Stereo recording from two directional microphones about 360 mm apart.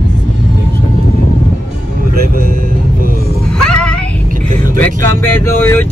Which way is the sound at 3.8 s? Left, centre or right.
Centre.